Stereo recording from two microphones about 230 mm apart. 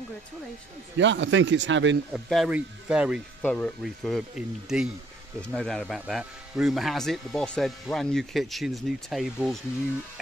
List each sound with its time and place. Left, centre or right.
0.9 s speech: right
2.2 s speech: centre